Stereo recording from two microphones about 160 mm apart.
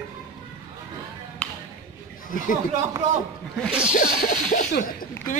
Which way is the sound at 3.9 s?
55° left (ahead or behind).